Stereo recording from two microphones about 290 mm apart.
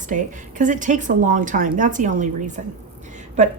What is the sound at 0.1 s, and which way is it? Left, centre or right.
A woman's voice, right.